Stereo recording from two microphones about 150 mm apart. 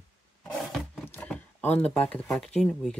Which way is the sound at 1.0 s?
10° left (ahead or behind).